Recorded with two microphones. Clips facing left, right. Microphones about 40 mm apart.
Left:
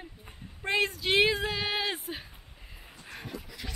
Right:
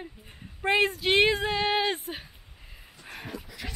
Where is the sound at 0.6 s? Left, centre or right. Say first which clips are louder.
Right 4 dB; centre.